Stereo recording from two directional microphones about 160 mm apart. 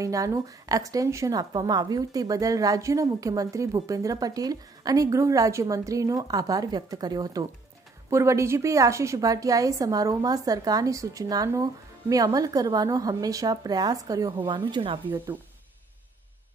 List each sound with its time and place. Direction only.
0.0 s a woman's voice: 20° right (ahead or behind)